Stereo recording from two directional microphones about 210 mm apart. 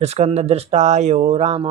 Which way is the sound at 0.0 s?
30° right (ahead or behind).